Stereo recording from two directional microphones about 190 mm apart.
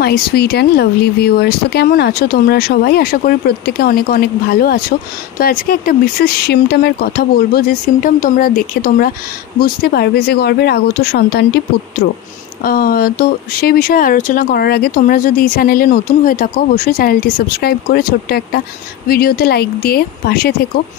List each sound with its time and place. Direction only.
0.0 s speech: 55° left (ahead or behind)
12.6 s speech: 50° left (ahead or behind)